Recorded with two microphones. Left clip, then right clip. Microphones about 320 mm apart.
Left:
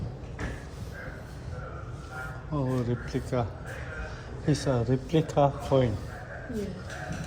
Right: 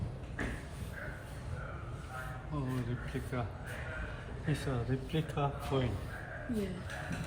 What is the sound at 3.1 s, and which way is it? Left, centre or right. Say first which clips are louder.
Speech: left 7 dB; centre.